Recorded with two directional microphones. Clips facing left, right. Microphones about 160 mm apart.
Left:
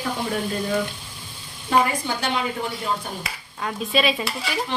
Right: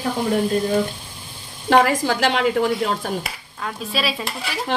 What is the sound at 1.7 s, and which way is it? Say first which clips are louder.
A woman's voice: right 5 dB; 90° right.